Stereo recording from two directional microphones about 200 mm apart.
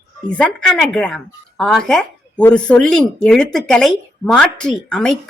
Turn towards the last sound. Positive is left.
turn(degrees=5)  # may be behind; listen again after turning